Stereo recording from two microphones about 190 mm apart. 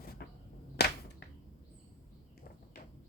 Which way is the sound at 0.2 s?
60° left (ahead or behind).